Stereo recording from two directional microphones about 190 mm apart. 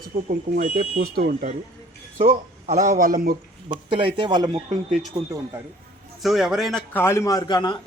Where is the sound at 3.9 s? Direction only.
25° right (ahead or behind).